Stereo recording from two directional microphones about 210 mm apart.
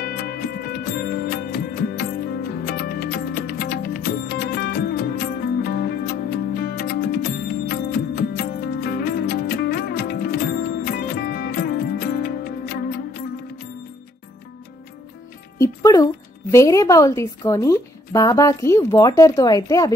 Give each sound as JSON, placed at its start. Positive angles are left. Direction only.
{"t": 0.0, "sound": "music", "side_deg": 45}
{"t": 15.5, "sound": "a woman's voice", "side_deg": 15}